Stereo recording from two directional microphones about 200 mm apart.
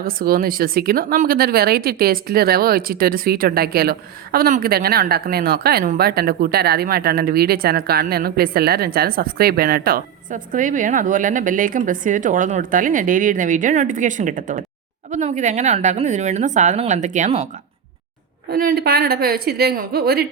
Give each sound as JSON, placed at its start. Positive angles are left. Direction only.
{"t": 0.0, "sound": "a woman's voice", "side_deg": -45}
{"t": 18.5, "sound": "speech", "side_deg": -50}